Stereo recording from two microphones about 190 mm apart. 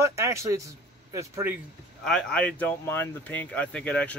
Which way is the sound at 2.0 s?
5° left (ahead or behind).